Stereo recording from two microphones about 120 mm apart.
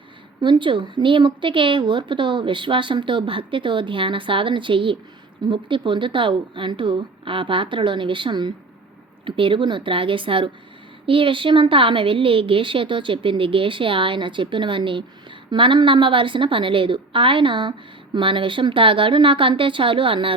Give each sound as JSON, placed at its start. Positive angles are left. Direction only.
{"t": 0.4, "sound": "a woman's voice", "side_deg": -45}